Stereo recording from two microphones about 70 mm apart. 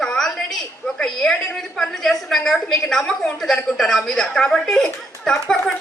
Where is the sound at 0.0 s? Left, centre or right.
Centre.